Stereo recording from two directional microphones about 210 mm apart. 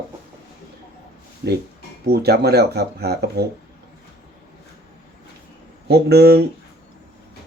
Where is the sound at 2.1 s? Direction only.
50° right (ahead or behind).